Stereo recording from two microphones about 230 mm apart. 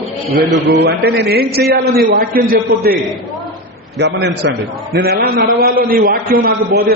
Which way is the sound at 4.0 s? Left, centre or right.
Right.